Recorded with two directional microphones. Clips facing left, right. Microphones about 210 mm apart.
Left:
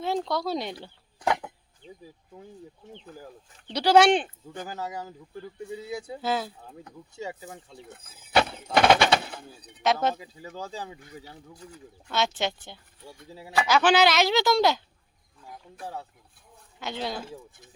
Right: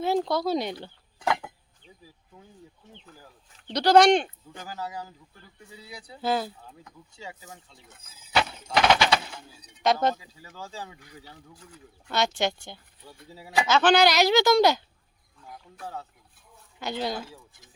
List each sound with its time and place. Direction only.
0.0 s speech: 5° right (ahead or behind)
1.8 s a sound: 25° left (ahead or behind)
3.7 s speech: 10° left (ahead or behind)
4.8 s speech: 20° left (ahead or behind)
6.2 s speech: centre (ahead or behind)
6.8 s speech: 35° left (ahead or behind)
7.9 s speech: 55° left (ahead or behind)
9.8 s speech: 5° left (ahead or behind)
10.5 s speech: 40° left (ahead or behind)
10.8 s speech: 20° left (ahead or behind)
12.1 s speech: centre (ahead or behind)
16.8 s speech: centre (ahead or behind)